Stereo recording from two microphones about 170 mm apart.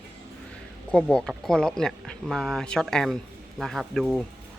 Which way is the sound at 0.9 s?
5° left (ahead or behind).